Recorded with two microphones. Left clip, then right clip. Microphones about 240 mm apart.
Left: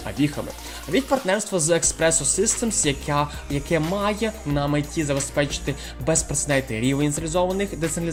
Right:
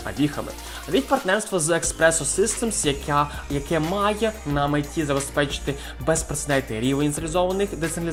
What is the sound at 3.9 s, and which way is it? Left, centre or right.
Speech, left.